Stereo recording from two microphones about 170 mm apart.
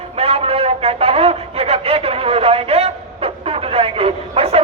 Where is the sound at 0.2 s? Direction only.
35° right (ahead or behind).